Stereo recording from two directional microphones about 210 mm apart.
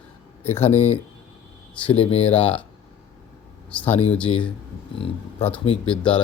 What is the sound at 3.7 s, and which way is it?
Speech, 5° left (ahead or behind).